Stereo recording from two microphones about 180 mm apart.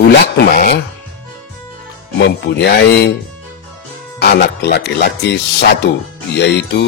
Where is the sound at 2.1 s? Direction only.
65° left (ahead or behind).